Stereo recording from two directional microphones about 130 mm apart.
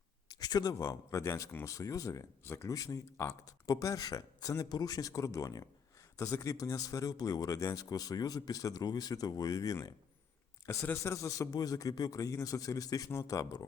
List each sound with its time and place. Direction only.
0.3 s speech: 30° left (ahead or behind)